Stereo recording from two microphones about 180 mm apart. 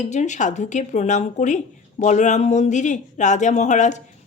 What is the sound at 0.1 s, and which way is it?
A woman's voice, 40° left (ahead or behind).